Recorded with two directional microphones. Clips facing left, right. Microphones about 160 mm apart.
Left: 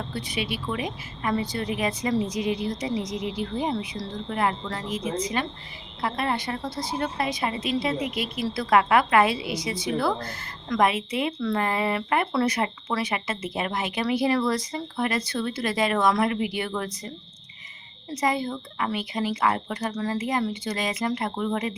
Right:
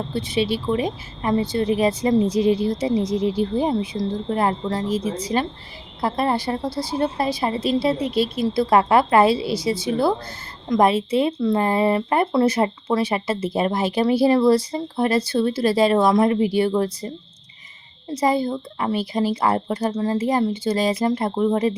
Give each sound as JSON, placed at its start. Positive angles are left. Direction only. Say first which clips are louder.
{"t": 0.1, "sound": "a woman's voice", "louder": "right 8 dB", "side_deg": -25}
{"t": 18.1, "sound": "a woman's voice", "louder": "right 6 dB", "side_deg": -30}